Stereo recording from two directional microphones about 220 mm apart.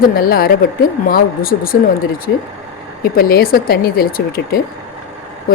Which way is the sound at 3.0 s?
45° left (ahead or behind).